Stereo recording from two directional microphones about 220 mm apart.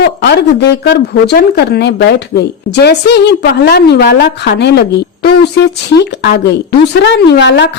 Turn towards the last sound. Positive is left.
turn(degrees=55)  # may be behind; listen again after turning